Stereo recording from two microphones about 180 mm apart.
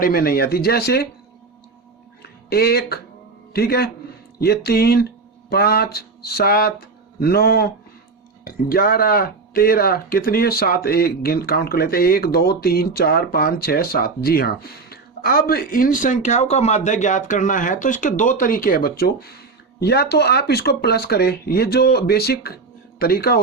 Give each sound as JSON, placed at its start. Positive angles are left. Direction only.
{"t": 0.0, "sound": "speech", "side_deg": 55}
{"t": 2.2, "sound": "music", "side_deg": 60}
{"t": 3.5, "sound": "speech", "side_deg": 60}